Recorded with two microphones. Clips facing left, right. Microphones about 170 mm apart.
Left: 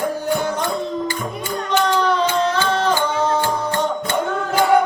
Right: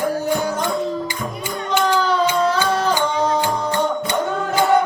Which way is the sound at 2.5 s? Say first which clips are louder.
Even; 5° right (ahead or behind).